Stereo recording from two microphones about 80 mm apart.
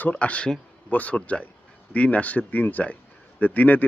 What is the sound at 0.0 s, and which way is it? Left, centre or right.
Speech, centre.